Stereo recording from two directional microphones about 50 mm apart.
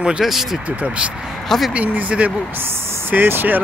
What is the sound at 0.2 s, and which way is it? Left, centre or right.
Speech, centre.